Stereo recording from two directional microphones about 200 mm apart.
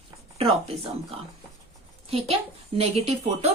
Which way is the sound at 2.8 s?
30° right (ahead or behind).